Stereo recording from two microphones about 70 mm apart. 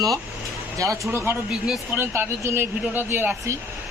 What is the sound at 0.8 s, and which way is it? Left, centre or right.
Speech, right.